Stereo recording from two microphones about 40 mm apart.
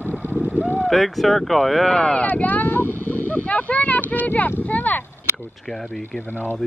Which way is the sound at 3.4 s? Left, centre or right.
Left.